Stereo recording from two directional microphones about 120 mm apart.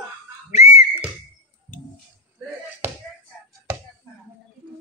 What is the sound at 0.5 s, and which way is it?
Whistle, 65° left (ahead or behind).